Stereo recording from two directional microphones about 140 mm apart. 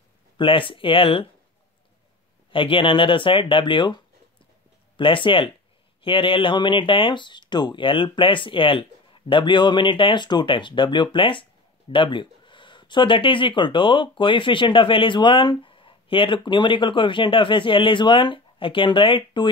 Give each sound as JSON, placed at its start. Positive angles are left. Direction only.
{"t": 0.4, "sound": "speech", "side_deg": 40}
{"t": 2.5, "sound": "speech", "side_deg": 40}